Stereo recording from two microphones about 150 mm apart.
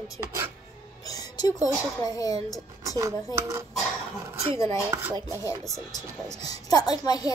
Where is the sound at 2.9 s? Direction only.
20° right (ahead or behind).